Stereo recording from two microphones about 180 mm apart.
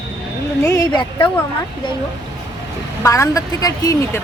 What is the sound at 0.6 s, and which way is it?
Speech, 15° left (ahead or behind).